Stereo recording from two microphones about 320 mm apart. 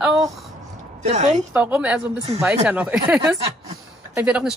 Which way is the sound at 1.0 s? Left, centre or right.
Right.